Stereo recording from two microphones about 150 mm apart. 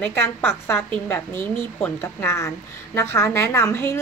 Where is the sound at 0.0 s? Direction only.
15° left (ahead or behind).